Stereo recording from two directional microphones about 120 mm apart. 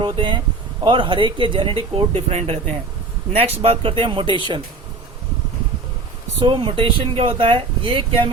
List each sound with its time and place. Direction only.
0.0 s speech: 40° right (ahead or behind)
6.4 s speech: 40° right (ahead or behind)